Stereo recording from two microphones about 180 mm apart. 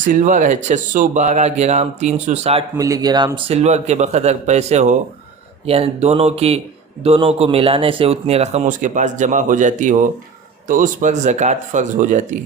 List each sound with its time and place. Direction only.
0.0 s speech: 45° right (ahead or behind)
2.7 s speech: 20° right (ahead or behind); by 12.4 s 45° right (ahead or behind)